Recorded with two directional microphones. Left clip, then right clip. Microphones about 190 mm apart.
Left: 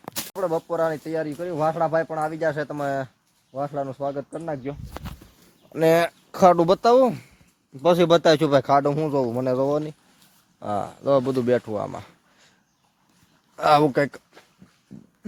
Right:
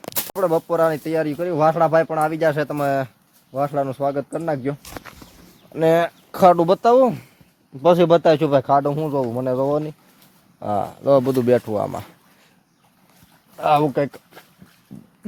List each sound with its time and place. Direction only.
0.3 s speech: 10° right (ahead or behind)
5.7 s speech: 15° left (ahead or behind)
10.6 s speech: 5° left (ahead or behind)
13.6 s speech: 40° left (ahead or behind)
14.9 s speech: 10° left (ahead or behind)